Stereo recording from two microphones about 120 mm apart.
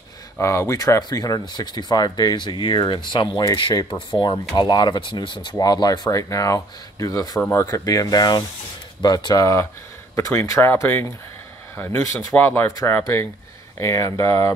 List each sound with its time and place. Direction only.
0.4 s speech: 25° left (ahead or behind)